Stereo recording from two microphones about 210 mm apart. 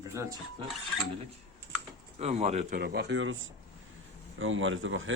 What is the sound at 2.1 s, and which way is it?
A man's voice, 30° right (ahead or behind).